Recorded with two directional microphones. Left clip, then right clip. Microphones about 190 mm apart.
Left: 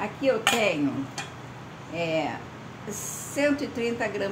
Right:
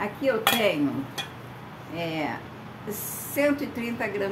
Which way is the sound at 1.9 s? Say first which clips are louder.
Left 4 dB; 10° left (ahead or behind).